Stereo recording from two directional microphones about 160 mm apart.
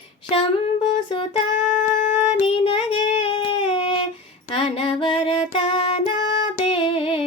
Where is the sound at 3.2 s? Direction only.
30° left (ahead or behind).